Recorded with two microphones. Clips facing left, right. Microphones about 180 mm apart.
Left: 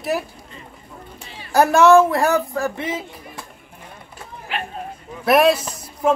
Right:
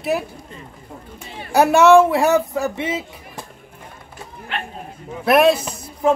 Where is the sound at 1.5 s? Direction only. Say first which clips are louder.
Right 1 dB; 5° right (ahead or behind).